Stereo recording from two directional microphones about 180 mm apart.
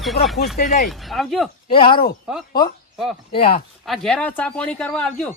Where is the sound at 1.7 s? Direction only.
30° left (ahead or behind).